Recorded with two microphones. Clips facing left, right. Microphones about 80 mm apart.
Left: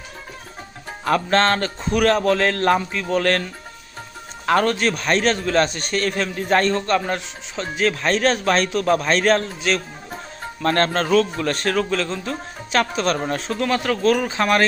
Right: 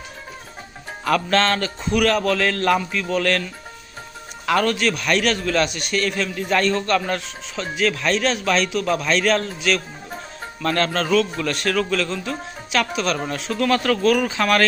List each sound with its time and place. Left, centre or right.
1.0 s a man's voice: left
13.6 s speech: left